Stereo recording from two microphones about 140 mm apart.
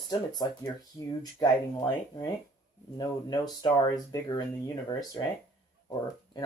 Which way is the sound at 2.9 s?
30° left (ahead or behind).